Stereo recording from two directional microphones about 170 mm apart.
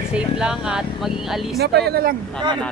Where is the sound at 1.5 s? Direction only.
75° right (ahead or behind).